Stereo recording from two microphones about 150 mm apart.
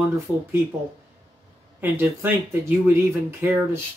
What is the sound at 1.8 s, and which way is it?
Speech, 15° right (ahead or behind).